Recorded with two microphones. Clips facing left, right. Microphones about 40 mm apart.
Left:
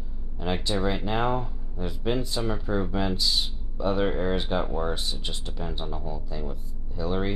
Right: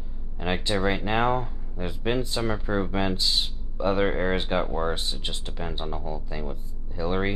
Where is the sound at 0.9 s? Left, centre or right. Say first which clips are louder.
Right 2 dB; right.